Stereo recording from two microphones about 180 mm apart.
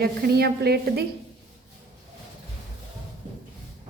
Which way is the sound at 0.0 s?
60° right (ahead or behind).